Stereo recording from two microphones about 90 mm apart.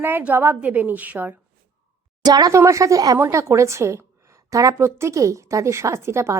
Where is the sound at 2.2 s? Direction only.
45° right (ahead or behind).